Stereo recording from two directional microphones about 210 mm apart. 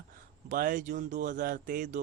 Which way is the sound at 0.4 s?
40° right (ahead or behind).